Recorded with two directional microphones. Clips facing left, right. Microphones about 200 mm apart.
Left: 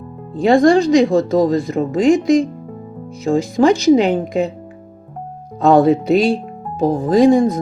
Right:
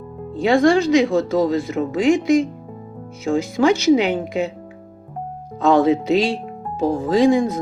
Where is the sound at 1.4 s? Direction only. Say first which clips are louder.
Left 3 dB; 40° left (ahead or behind).